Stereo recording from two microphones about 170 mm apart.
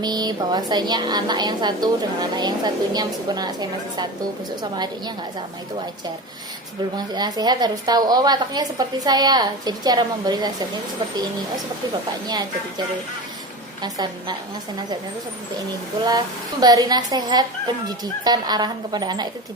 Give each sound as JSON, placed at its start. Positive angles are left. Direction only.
{"t": 0.0, "sound": "a woman's voice", "side_deg": -25}
{"t": 6.9, "sound": "a woman's voice", "side_deg": -25}
{"t": 12.3, "sound": "a woman's voice", "side_deg": -25}
{"t": 13.8, "sound": "a woman's voice", "side_deg": -25}
{"t": 16.0, "sound": "a woman's voice", "side_deg": -25}